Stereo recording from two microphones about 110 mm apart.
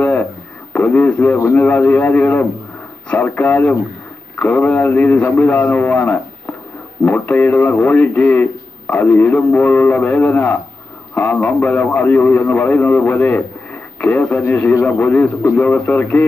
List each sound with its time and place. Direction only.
0.7 s a man's voice: 15° left (ahead or behind)